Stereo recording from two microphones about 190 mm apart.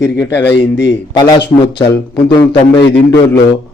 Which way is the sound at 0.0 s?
10° left (ahead or behind).